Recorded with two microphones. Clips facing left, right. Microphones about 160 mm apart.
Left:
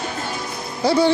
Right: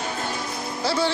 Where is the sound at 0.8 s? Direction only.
15° left (ahead or behind).